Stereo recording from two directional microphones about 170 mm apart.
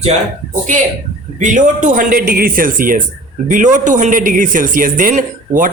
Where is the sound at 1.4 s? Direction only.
50° right (ahead or behind).